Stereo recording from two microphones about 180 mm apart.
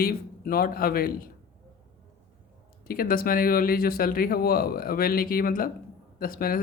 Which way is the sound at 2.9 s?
55° left (ahead or behind).